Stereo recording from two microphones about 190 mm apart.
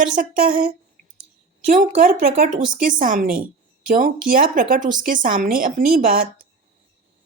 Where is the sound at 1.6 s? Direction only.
40° right (ahead or behind).